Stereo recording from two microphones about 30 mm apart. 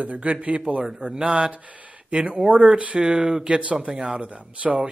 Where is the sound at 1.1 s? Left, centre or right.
Right.